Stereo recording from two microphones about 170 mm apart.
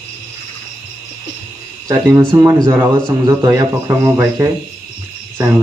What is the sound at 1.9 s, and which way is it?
A man's voice, 20° right (ahead or behind).